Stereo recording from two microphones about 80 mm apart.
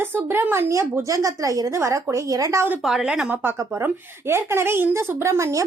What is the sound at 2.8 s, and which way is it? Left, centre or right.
Speech, centre.